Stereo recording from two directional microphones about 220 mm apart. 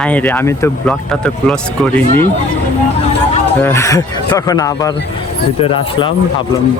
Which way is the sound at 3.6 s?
10° left (ahead or behind).